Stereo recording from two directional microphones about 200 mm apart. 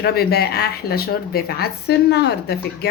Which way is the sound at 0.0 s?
50° left (ahead or behind).